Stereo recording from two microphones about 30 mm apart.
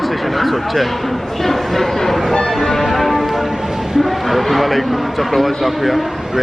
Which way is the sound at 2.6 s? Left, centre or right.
Centre.